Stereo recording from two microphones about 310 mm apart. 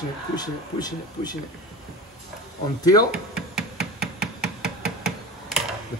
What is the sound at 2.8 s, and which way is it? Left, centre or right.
Speech, centre.